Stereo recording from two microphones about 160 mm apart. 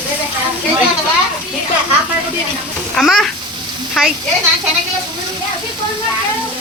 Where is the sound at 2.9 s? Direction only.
Centre (ahead or behind).